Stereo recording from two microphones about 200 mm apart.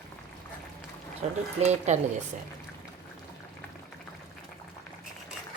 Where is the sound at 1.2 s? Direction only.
30° right (ahead or behind).